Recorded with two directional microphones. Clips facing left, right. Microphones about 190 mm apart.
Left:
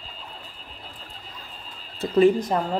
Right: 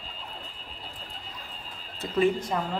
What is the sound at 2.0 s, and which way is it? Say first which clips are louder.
Speech: left 7 dB; 35° left (ahead or behind).